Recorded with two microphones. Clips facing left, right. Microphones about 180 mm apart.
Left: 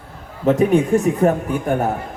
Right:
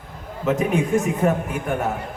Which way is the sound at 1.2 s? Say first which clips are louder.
Left 4 dB; 35° left (ahead or behind).